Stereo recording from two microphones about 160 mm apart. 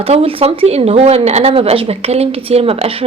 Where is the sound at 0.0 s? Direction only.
35° right (ahead or behind).